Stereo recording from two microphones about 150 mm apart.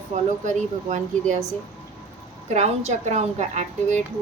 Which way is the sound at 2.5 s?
45° right (ahead or behind).